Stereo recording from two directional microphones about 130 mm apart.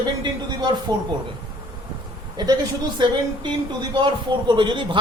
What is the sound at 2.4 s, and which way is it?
Speech, 35° right (ahead or behind).